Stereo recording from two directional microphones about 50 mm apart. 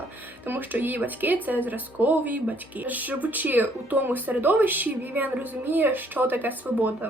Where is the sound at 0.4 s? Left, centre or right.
Right.